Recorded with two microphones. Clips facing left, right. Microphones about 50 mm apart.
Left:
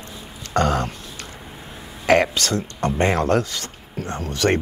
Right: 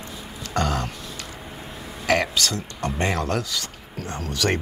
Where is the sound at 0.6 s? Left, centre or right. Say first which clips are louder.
Left 5 dB; left.